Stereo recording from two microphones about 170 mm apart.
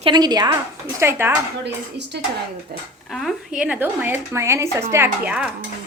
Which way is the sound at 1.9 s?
90° right.